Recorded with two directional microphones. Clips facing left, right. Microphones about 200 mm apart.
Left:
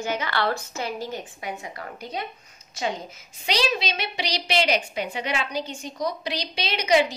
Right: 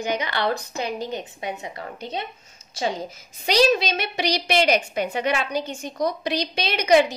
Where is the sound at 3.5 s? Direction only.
45° right (ahead or behind).